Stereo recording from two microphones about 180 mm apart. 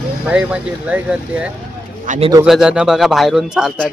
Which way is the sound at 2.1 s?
45° right (ahead or behind).